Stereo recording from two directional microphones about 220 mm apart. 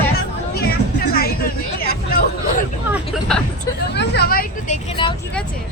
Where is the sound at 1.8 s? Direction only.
45° left (ahead or behind).